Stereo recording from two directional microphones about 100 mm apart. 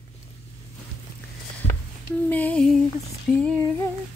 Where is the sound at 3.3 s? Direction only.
10° left (ahead or behind).